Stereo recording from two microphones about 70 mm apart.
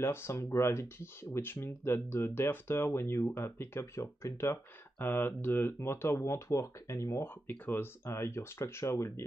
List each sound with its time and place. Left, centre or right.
0.0 s speech: left
4.9 s speech: left
7.4 s speech: left
8.1 s speech: left